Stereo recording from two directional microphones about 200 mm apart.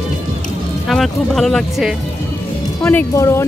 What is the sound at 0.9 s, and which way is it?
Speech, centre (ahead or behind).